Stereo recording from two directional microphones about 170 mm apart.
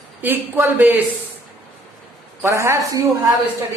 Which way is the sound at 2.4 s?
15° right (ahead or behind).